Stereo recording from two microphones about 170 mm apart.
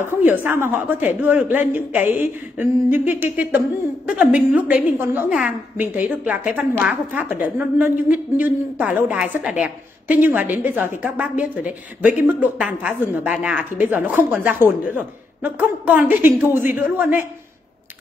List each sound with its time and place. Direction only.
0.0 s a woman's voice: 10° right (ahead or behind)